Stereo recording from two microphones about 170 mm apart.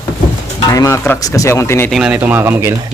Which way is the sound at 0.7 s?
20° left (ahead or behind).